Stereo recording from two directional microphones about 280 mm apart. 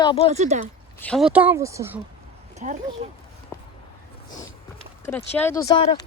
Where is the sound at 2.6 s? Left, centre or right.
Right.